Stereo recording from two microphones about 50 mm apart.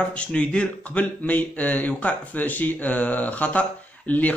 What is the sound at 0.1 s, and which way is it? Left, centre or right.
Speech, left.